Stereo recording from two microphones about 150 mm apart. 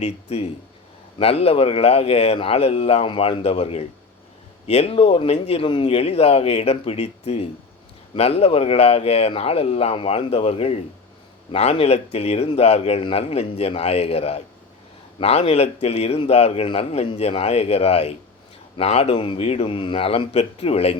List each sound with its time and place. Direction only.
0.0 s a man's voice: 45° left (ahead or behind)